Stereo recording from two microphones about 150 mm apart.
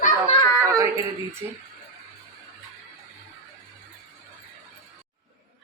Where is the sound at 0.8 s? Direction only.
20° right (ahead or behind).